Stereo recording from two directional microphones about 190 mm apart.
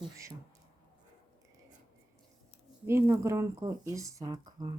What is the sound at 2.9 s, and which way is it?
Speech, 10° right (ahead or behind).